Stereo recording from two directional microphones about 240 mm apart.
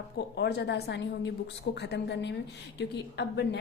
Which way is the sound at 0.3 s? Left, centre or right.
Left.